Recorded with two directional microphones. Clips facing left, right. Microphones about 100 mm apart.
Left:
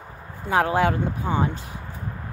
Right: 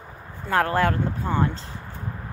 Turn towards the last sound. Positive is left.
turn(degrees=15)  # may be behind; listen again after turning